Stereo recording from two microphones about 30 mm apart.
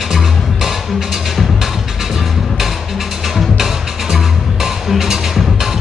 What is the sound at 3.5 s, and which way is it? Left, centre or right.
Music, centre.